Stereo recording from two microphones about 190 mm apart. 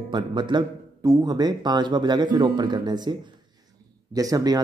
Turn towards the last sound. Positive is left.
turn(degrees=-20)  # may be behind; listen again after turning